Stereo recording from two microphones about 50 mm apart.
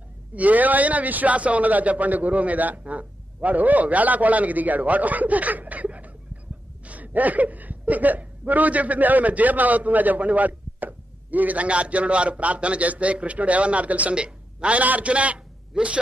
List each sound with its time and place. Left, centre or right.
0.3 s a man's voice: right